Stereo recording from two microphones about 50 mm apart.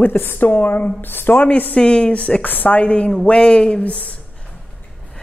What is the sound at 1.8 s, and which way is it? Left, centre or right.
Speech, left.